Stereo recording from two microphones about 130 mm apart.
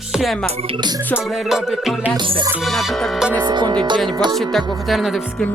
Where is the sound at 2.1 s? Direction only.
40° right (ahead or behind).